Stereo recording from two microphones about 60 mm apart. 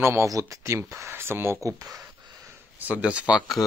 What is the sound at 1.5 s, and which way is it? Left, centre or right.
Speech, right.